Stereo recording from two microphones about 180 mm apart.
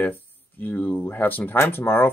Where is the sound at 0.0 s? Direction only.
10° left (ahead or behind).